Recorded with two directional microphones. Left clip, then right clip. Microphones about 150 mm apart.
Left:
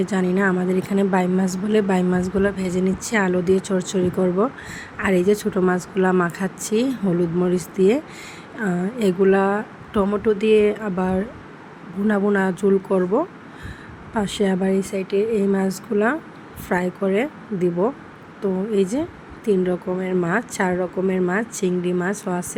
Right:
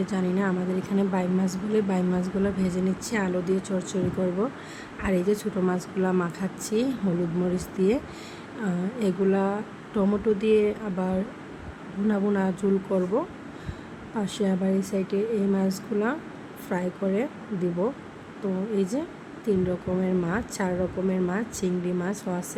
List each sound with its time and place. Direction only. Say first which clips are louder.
0.0 s speech: left 7 dB; 40° left (ahead or behind)
4.9 s speech: left 7 dB; 40° left (ahead or behind)